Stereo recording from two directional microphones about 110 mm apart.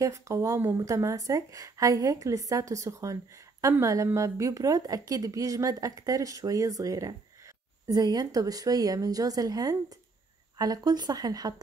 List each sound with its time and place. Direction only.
0.0 s a woman's voice: 30° right (ahead or behind)